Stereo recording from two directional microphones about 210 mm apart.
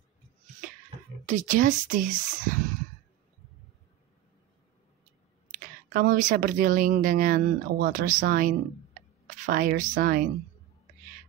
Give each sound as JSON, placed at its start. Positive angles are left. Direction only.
{"t": 1.2, "sound": "speech", "side_deg": -35}
{"t": 5.9, "sound": "speech", "side_deg": -40}